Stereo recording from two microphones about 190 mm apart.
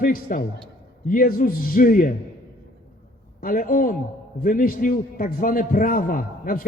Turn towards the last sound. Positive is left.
turn(degrees=45)  # may be behind; listen again after turning